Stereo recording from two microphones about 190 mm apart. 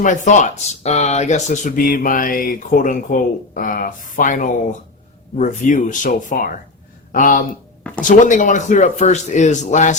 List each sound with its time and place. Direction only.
0.0 s a man's voice: 40° left (ahead or behind)